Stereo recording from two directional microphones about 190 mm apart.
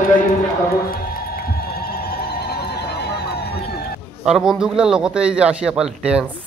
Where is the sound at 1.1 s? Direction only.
55° left (ahead or behind).